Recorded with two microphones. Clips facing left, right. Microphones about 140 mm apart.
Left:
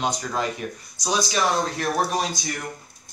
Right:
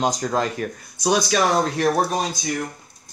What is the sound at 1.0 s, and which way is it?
Speech, 60° right (ahead or behind).